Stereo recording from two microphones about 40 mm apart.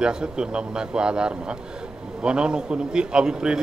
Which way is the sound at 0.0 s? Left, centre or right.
Right.